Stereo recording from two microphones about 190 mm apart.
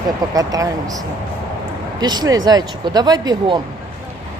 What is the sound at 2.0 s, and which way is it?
Speech, 20° right (ahead or behind).